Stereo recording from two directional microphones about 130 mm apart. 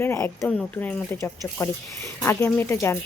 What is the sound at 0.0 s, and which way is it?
Speech, 15° left (ahead or behind).